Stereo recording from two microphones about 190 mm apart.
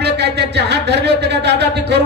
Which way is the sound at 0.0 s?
60° right (ahead or behind).